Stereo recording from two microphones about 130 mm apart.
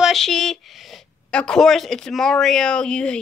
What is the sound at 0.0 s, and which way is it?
Speech, centre (ahead or behind).